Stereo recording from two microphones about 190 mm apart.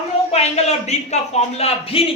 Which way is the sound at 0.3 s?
35° left (ahead or behind).